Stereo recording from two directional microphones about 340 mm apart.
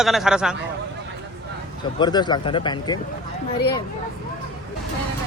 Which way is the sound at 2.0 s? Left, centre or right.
Centre.